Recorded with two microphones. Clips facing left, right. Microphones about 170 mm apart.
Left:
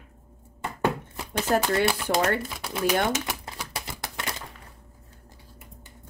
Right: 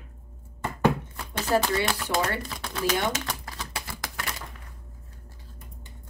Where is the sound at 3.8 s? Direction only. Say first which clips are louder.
Left 1 dB; 20° left (ahead or behind).